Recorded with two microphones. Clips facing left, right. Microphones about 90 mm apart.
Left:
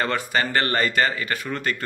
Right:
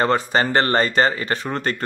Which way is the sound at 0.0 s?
30° right (ahead or behind).